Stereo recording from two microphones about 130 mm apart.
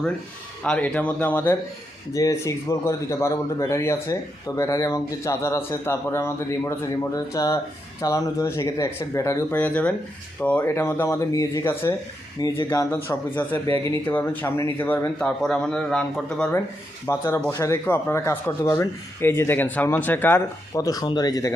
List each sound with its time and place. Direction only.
0.6 s a man's voice: 10° left (ahead or behind)
9.6 s a man's voice: 10° left (ahead or behind)
17.1 s a man's voice: 20° left (ahead or behind)
20.7 s a man's voice: 30° left (ahead or behind)